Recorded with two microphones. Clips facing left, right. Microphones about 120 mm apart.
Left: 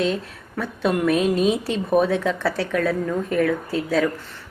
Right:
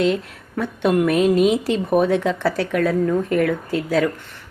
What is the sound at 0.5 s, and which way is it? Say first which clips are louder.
Speech: right 4 dB; 20° right (ahead or behind).